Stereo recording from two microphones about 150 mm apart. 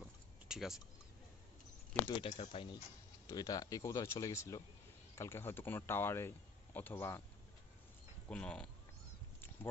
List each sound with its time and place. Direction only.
0.5 s speech: centre (ahead or behind)
2.0 s speech: 35° left (ahead or behind); by 7.2 s 15° left (ahead or behind)
8.3 s speech: 5° left (ahead or behind)